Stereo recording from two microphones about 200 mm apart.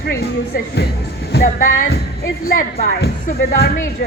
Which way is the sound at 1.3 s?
50° left (ahead or behind).